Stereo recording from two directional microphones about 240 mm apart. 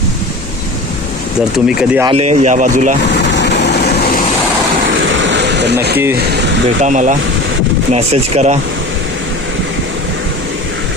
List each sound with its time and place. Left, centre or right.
1.5 s speech: centre
2.3 s speech: right
3.1 s vehicle: left
5.1 s a sound: right
6.8 s speech: right